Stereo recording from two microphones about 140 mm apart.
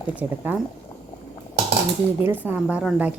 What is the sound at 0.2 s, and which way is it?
Speech, 10° right (ahead or behind).